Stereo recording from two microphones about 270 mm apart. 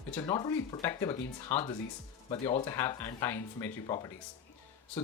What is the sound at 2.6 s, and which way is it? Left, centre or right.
Speech, centre.